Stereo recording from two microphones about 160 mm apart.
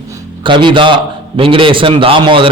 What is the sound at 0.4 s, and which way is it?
A man's voice, 30° right (ahead or behind).